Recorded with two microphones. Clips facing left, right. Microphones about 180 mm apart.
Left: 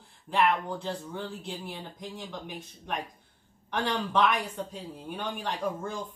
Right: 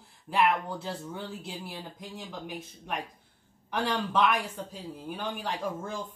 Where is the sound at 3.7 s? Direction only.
5° right (ahead or behind).